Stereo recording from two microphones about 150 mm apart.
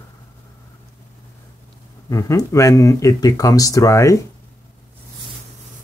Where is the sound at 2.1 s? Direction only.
20° left (ahead or behind).